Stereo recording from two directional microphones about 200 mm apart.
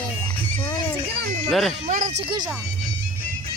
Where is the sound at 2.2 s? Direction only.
25° right (ahead or behind).